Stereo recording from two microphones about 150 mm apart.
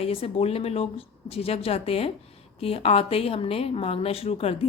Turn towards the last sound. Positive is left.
turn(degrees=40)  # may be behind; listen again after turning